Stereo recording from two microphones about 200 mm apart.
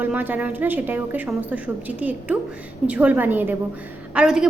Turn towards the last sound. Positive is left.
turn(degrees=-5)  # may be behind; listen again after turning